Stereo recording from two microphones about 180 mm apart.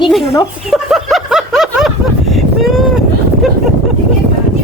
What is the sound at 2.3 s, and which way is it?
Vehicle, centre (ahead or behind).